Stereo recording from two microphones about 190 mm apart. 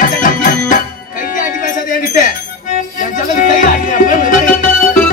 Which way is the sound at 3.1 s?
45° left (ahead or behind).